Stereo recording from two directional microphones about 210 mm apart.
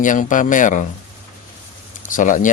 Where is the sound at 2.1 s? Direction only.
40° left (ahead or behind).